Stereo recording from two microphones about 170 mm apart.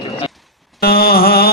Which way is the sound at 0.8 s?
65° left (ahead or behind).